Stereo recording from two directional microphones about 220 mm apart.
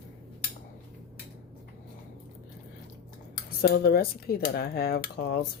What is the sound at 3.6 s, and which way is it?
Speech, 45° left (ahead or behind).